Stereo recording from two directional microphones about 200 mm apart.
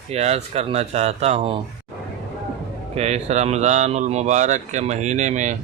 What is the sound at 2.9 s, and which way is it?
Speech, 30° right (ahead or behind).